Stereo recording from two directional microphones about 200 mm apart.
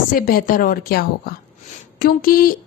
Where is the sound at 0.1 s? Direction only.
45° left (ahead or behind).